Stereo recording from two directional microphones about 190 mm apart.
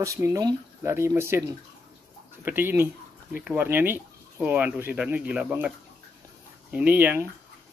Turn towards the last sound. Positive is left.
turn(degrees=-10)  # may be behind; listen again after turning